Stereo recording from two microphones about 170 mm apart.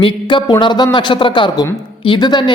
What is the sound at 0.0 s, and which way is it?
A man's voice, 30° left (ahead or behind).